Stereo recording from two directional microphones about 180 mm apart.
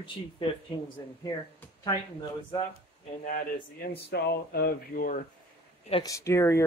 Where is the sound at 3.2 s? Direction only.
50° left (ahead or behind).